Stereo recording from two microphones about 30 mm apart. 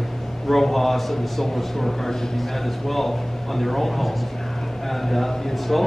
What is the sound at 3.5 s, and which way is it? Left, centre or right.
A man's voice, centre.